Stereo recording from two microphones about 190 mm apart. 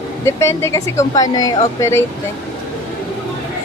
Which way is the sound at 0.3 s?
15° left (ahead or behind).